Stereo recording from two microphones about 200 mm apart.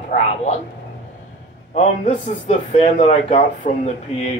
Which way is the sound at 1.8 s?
40° left (ahead or behind).